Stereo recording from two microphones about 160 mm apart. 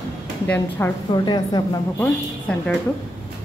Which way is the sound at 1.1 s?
25° left (ahead or behind).